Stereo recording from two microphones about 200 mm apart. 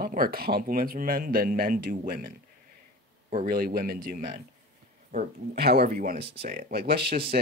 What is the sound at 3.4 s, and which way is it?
Speech, 45° right (ahead or behind).